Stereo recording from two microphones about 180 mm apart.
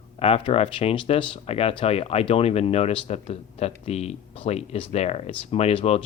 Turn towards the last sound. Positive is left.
turn(degrees=35)  # may be behind; listen again after turning